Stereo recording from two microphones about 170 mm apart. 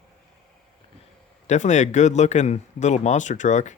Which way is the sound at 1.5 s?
45° left (ahead or behind).